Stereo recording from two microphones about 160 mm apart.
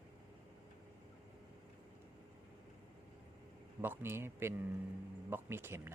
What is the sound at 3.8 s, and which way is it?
Speech, 15° right (ahead or behind).